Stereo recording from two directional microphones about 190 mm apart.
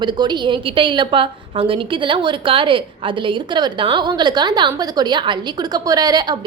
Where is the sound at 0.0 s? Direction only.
25° right (ahead or behind).